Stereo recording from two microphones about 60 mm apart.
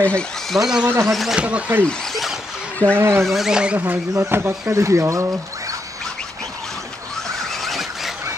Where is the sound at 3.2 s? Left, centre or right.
Centre.